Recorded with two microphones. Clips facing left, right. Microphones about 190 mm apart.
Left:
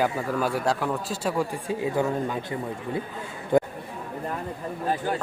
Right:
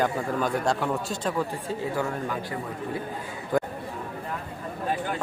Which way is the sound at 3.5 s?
25° left (ahead or behind).